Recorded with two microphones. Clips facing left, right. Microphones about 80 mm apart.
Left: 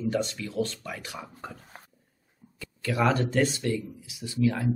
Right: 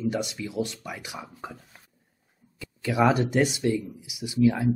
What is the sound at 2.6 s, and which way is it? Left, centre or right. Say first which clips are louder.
Speech: right 3 dB; centre.